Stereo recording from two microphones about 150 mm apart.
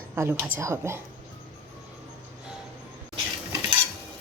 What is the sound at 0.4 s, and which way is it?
Speech, 20° right (ahead or behind).